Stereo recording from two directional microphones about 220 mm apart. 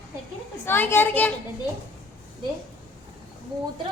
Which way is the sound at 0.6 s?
10° left (ahead or behind).